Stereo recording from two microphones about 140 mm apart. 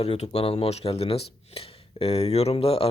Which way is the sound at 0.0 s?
45° left (ahead or behind).